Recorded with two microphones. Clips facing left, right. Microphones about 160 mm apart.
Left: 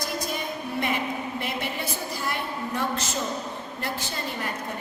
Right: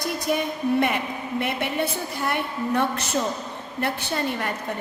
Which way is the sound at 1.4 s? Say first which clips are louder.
Right 5 dB; 60° right (ahead or behind).